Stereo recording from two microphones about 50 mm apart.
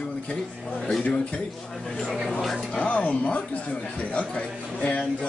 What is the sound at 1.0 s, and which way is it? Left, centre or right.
Speech, left.